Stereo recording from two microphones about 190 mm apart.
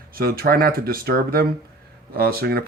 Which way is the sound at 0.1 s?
50° right (ahead or behind).